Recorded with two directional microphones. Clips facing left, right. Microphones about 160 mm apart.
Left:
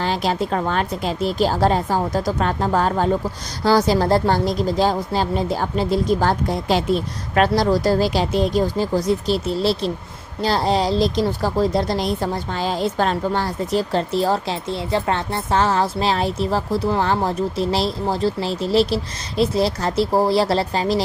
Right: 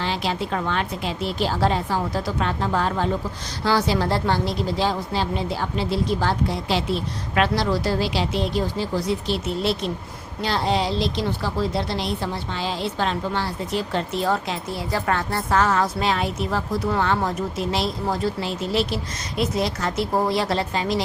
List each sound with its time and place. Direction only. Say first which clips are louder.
0.0 s a woman's voice: left 4 dB; 45° left (ahead or behind)